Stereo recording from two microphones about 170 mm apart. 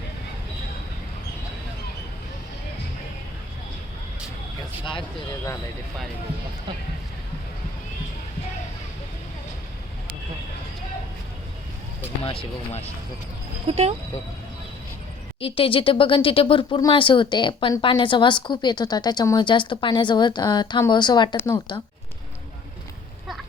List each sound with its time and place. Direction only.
12.2 s speech: 35° left (ahead or behind)
13.7 s speech: 35° right (ahead or behind)
15.4 s speech: 35° left (ahead or behind)
21.3 s speech: 15° left (ahead or behind)